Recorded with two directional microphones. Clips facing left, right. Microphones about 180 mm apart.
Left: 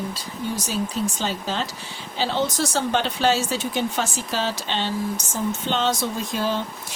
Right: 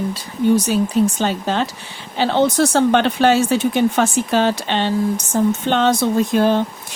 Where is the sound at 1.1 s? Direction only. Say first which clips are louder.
Right 7 dB; 60° right (ahead or behind).